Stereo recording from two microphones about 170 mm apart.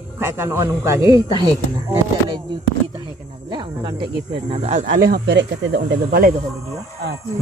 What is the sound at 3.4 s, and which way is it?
Speech, 25° right (ahead or behind).